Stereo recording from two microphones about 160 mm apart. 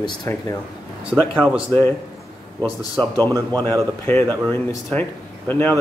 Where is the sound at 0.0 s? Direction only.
30° left (ahead or behind).